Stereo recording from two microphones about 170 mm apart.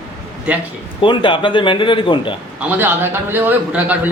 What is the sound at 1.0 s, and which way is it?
A man's voice, 30° left (ahead or behind).